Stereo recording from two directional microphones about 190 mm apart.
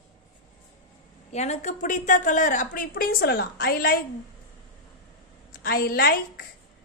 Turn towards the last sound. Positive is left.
turn(degrees=50)  # may be behind; listen again after turning